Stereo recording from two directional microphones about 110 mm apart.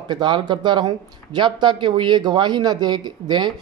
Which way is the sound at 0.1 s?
45° right (ahead or behind).